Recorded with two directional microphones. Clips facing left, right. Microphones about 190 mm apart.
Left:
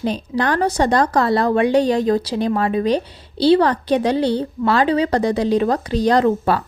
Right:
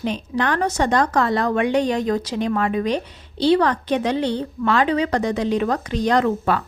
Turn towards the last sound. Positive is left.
turn(degrees=35)  # may be behind; listen again after turning